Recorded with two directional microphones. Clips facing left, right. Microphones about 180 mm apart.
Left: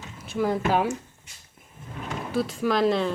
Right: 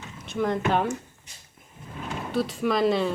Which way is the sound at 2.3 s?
Centre (ahead or behind).